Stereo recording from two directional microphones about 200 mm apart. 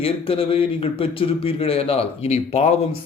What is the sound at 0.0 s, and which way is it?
A man's voice, 25° left (ahead or behind).